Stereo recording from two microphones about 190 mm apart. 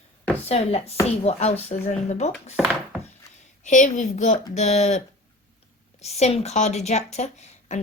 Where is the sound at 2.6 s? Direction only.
Centre (ahead or behind).